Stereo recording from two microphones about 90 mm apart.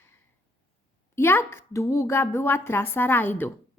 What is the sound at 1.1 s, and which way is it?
A woman's voice, 25° left (ahead or behind).